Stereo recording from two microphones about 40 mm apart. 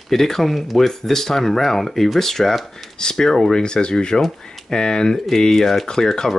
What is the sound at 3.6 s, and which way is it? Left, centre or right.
Speech, left.